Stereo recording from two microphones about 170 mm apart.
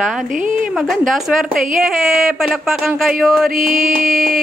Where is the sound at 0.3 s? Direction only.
50° right (ahead or behind).